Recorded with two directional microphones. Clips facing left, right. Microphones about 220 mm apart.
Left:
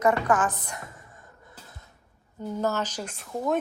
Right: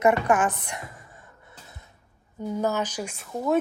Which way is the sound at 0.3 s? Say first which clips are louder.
Right 2 dB; 15° right (ahead or behind).